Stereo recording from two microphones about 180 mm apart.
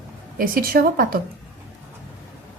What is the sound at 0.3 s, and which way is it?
Speech, 50° right (ahead or behind).